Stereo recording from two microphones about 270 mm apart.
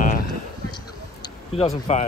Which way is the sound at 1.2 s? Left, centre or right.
Left.